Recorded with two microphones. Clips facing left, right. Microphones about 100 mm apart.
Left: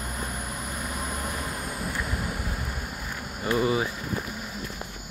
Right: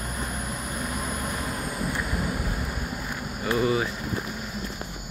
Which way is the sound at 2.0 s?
5° right (ahead or behind).